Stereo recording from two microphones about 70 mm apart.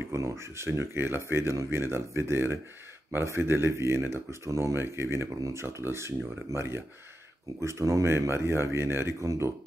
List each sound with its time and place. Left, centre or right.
0.1 s speech: right